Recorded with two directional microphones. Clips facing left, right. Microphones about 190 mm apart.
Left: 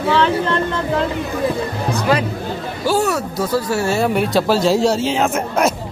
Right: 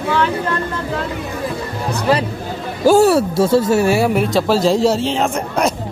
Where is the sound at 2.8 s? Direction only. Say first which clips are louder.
Right 7 dB; 40° right (ahead or behind); by 4.1 s 15° right (ahead or behind).